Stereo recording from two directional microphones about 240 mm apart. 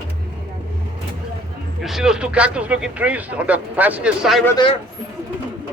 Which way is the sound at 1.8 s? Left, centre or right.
Centre.